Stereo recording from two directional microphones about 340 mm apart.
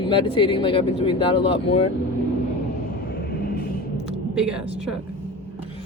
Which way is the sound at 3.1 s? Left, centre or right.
Left.